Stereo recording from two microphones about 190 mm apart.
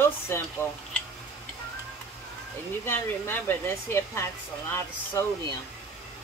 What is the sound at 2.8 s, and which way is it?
Speech, 10° left (ahead or behind).